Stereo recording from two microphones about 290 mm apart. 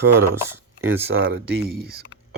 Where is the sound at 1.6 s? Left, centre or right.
Right.